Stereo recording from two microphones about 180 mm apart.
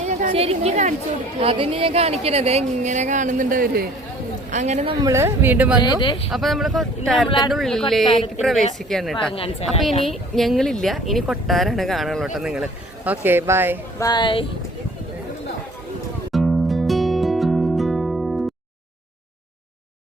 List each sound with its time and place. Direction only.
0.0 s a sound: 45° right (ahead or behind)
0.3 s speech: 35° right (ahead or behind); by 3.8 s 50° right (ahead or behind)
4.5 s speech: 40° right (ahead or behind)
4.9 s speech: 20° right (ahead or behind)
5.8 s speech: 25° left (ahead or behind)
6.3 s a woman's voice: centre (ahead or behind)
7.3 s speech: 25° left (ahead or behind)
7.5 s a woman's voice: centre (ahead or behind)
9.3 s speech: 30° left (ahead or behind)
10.1 s a woman's voice: centre (ahead or behind)
14.0 s speech: 25° left (ahead or behind)
16.3 s music: centre (ahead or behind)